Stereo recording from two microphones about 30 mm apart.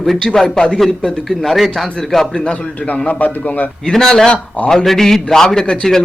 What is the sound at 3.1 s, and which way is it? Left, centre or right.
Speech, left.